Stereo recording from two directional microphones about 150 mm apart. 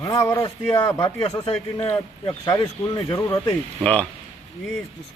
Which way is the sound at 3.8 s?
10° left (ahead or behind).